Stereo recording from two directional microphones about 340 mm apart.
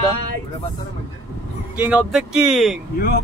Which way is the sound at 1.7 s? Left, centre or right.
Centre.